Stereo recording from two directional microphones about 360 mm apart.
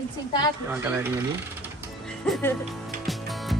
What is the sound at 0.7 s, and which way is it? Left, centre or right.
Speech, centre.